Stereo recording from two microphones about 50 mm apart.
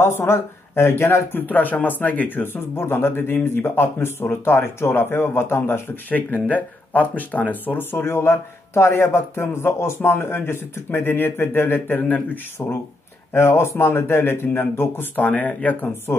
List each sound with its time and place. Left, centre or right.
0.0 s speech: left
6.0 s speech: left
8.0 s speech: left
13.3 s speech: left